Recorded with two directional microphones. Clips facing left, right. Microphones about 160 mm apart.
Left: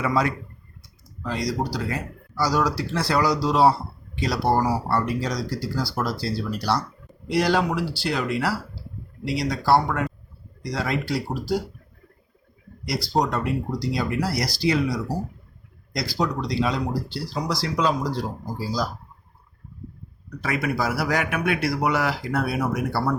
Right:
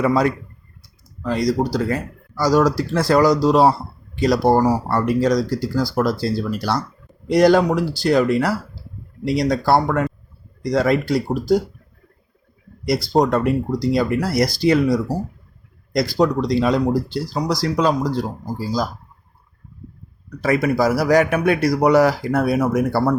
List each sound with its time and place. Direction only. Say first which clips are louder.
0.0 s speech: right 6 dB; 40° right (ahead or behind)
1.2 s speech: right 7 dB; 50° right (ahead or behind)
12.8 s speech: right 6 dB; 50° right (ahead or behind)
20.4 s speech: right 8 dB; 40° right (ahead or behind)